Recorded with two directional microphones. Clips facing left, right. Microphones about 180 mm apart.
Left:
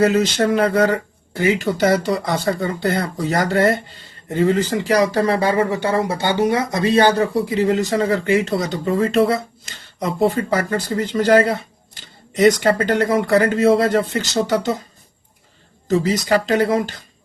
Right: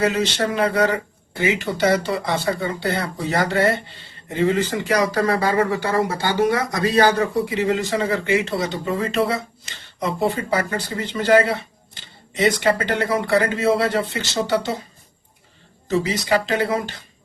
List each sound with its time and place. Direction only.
0.0 s speech: 45° left (ahead or behind)
15.9 s speech: 45° left (ahead or behind)